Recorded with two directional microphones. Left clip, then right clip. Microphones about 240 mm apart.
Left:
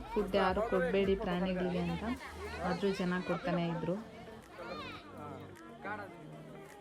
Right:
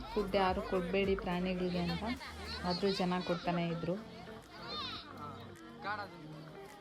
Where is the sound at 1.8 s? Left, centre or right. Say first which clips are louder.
Even; right.